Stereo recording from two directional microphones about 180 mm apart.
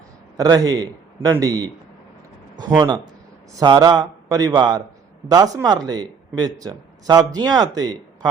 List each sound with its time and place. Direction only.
0.3 s a man's voice: 20° right (ahead or behind)